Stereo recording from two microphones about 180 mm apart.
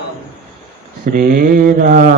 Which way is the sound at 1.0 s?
55° right (ahead or behind).